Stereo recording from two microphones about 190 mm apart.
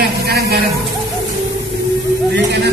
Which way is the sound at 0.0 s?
55° right (ahead or behind).